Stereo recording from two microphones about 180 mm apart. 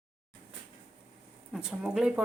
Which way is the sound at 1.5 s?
5° right (ahead or behind).